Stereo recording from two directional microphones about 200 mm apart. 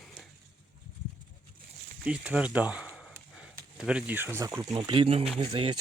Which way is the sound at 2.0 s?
5° right (ahead or behind).